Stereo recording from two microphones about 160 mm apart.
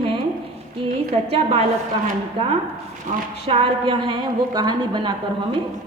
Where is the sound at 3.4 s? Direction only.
35° right (ahead or behind).